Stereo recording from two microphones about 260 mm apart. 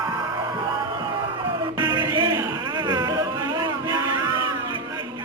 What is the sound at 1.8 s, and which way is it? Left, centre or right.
Music, centre.